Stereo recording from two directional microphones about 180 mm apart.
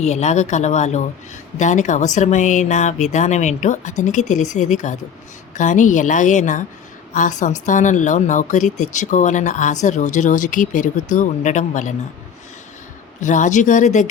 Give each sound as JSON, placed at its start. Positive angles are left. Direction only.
{"t": 0.0, "sound": "a woman's voice", "side_deg": 40}
{"t": 13.2, "sound": "a woman's voice", "side_deg": 45}